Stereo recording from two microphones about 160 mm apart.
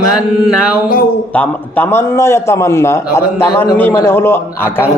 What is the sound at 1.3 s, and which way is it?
A man's voice, 10° left (ahead or behind).